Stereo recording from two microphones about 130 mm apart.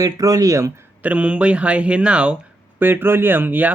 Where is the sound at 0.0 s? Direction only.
25° right (ahead or behind).